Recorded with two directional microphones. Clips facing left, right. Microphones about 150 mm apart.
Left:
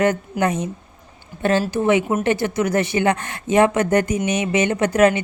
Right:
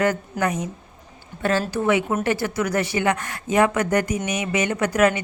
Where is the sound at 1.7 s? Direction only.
20° left (ahead or behind).